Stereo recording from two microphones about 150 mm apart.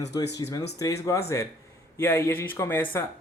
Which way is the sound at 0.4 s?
25° left (ahead or behind).